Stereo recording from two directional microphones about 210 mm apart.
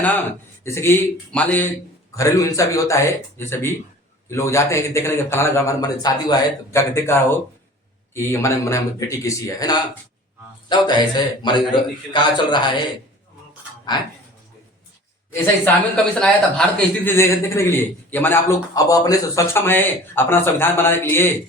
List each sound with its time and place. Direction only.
0.6 s a man's voice: 10° left (ahead or behind)
15.3 s a man's voice: 10° left (ahead or behind)